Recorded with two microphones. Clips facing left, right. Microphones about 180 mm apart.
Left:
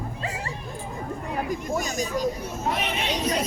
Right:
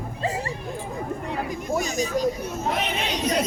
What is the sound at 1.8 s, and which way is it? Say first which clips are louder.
Speech: right 5 dB; 45° left (ahead or behind).